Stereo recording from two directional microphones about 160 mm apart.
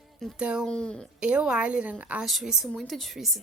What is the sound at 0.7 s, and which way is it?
Speech, 5° left (ahead or behind).